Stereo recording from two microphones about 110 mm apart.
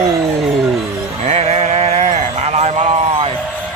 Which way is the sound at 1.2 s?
80° right.